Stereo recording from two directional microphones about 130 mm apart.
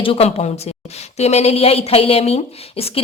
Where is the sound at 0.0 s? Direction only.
50° left (ahead or behind).